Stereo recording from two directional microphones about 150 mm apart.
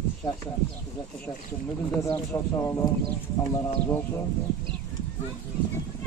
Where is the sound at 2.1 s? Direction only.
20° left (ahead or behind).